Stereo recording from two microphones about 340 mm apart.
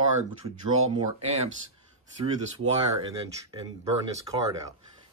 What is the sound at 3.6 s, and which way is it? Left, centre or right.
Speech, centre.